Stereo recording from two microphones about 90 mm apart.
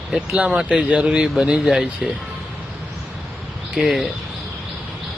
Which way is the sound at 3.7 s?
5° right (ahead or behind).